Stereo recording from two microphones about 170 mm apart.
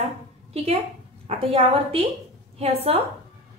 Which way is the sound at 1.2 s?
35° right (ahead or behind).